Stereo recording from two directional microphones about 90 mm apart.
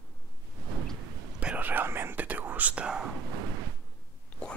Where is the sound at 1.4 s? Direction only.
20° right (ahead or behind).